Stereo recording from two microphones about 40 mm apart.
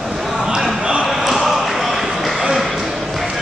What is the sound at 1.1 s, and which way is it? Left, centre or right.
Basketball bounce, centre.